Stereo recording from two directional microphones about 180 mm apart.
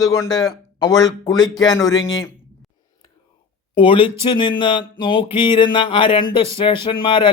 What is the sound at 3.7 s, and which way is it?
Speech, 30° left (ahead or behind).